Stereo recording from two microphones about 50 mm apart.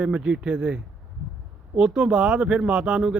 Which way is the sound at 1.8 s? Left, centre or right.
Right.